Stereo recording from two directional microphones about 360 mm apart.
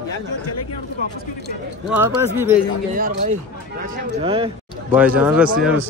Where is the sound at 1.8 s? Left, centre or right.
Centre.